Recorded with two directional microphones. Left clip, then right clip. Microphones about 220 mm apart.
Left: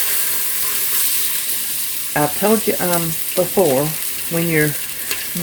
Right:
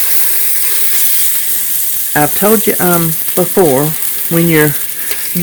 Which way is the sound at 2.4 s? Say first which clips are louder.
Right 5 dB; 50° right (ahead or behind).